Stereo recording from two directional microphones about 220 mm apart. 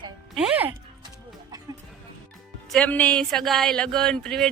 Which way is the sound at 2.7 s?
5° left (ahead or behind).